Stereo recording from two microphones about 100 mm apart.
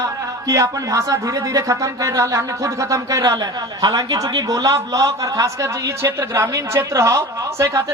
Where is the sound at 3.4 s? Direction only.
40° right (ahead or behind).